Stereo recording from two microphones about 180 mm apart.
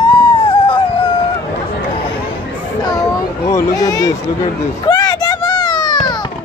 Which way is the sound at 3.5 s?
20° left (ahead or behind).